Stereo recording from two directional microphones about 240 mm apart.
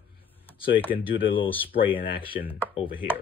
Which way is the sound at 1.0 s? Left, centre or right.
Left.